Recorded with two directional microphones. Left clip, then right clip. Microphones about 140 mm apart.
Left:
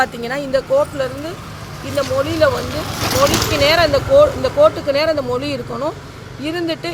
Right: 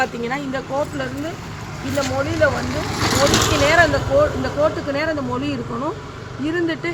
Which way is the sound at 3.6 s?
55° left (ahead or behind).